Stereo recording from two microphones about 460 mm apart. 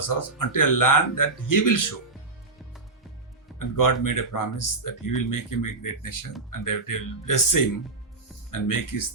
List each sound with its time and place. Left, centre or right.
0.0 s speech: left
3.6 s speech: left